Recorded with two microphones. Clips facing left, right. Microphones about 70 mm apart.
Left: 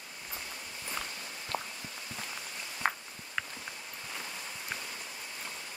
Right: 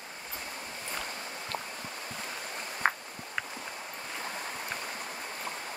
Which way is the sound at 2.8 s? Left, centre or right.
Right.